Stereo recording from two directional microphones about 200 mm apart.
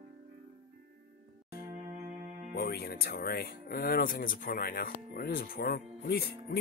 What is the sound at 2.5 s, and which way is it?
Speech, 50° left (ahead or behind).